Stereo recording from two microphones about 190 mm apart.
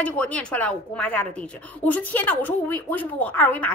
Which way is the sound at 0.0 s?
5° left (ahead or behind).